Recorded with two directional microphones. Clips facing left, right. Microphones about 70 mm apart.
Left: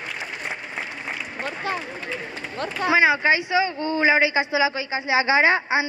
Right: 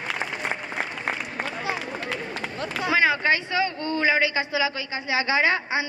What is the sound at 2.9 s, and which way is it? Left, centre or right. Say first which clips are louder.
A man's voice: left 3 dB; centre.